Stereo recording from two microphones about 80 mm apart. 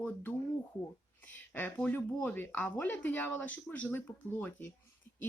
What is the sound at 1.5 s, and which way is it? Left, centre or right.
Speech, left.